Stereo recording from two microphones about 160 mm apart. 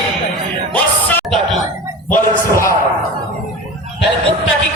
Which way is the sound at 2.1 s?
15° left (ahead or behind).